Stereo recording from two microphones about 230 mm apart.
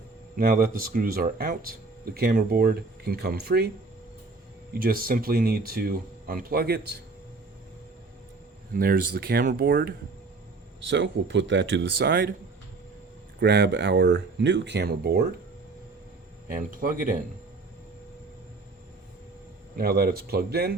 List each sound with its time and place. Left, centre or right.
0.3 s speech: right
4.7 s speech: right
8.7 s speech: right
13.4 s speech: right
16.6 s speech: right
19.7 s speech: right